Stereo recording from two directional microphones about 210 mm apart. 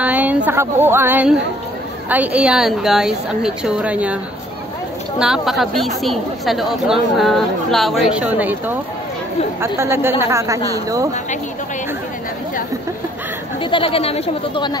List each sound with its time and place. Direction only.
0.0 s a sound: 5° right (ahead or behind)
0.5 s speech: 10° right (ahead or behind)
5.2 s speech: centre (ahead or behind)
13.6 s speech: 25° left (ahead or behind)